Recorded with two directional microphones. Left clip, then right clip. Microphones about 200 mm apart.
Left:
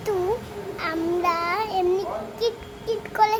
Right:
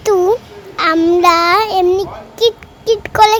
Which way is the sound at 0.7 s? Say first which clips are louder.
Right 14 dB; 50° right (ahead or behind).